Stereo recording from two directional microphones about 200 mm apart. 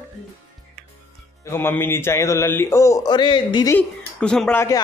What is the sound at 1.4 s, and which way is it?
Speech, 10° left (ahead or behind).